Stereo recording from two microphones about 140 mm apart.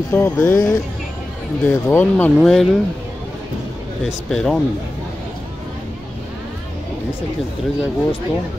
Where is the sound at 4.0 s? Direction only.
5° left (ahead or behind).